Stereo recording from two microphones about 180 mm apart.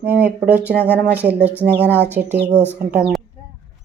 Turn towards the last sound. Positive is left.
turn(degrees=-5)  # may be behind; listen again after turning